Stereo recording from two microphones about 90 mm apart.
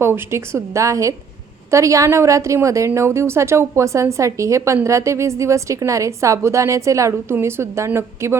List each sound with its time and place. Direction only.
0.0 s a woman's voice: 25° right (ahead or behind)